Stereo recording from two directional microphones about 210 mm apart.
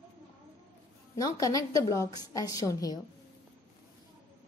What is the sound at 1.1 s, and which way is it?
A woman's voice, 15° left (ahead or behind).